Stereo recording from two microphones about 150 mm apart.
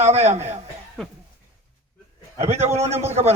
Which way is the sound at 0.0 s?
50° right (ahead or behind).